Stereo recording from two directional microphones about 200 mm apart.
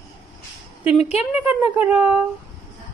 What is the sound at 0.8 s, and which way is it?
Speech, 30° left (ahead or behind).